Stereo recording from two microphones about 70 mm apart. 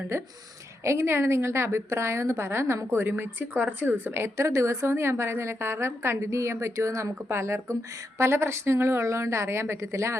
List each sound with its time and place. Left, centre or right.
0.9 s a woman's voice: right